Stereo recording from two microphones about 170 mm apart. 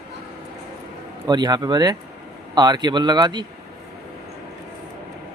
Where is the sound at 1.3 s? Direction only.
25° right (ahead or behind).